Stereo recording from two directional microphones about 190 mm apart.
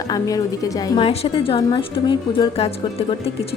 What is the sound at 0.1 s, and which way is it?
Speech, 20° left (ahead or behind).